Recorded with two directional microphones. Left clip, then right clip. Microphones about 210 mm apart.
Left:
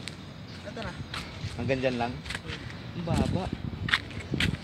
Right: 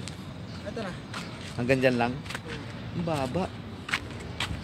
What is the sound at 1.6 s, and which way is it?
Speech, 10° right (ahead or behind).